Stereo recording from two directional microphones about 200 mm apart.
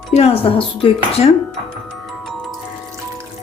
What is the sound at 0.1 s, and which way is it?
Speech, 30° left (ahead or behind).